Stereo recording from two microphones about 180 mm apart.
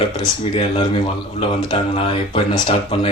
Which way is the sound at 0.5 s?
30° left (ahead or behind).